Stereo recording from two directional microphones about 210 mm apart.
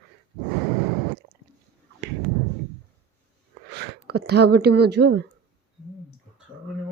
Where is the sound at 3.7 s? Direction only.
50° right (ahead or behind).